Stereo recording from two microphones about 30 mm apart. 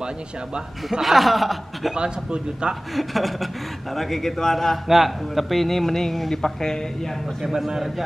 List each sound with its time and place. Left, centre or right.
1.0 s a man's voice: centre
2.0 s a man's voice: right
2.9 s a man's voice: centre
4.8 s speech: centre
7.5 s a man's voice: centre